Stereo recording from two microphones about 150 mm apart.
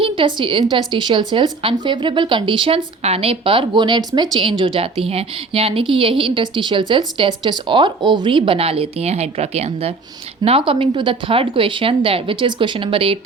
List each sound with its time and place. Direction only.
0.0 s a woman's voice: 35° right (ahead or behind)